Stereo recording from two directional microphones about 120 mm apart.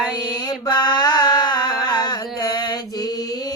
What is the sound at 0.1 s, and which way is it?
Mantra, 35° left (ahead or behind).